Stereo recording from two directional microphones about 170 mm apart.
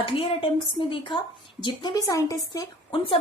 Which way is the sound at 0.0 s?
30° left (ahead or behind).